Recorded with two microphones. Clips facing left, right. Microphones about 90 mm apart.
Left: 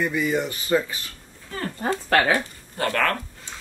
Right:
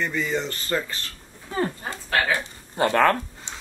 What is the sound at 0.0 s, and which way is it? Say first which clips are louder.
Speech: left 3 dB; 10° left (ahead or behind).